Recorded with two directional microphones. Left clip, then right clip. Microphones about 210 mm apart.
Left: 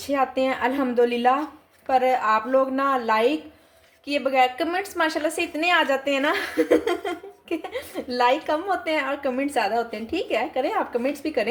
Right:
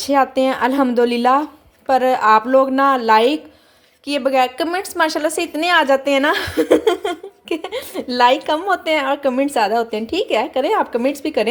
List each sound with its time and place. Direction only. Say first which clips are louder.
0.0 s a woman's voice: right 7 dB; 40° right (ahead or behind)